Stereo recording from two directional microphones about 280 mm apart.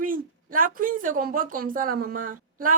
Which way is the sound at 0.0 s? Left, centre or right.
Right.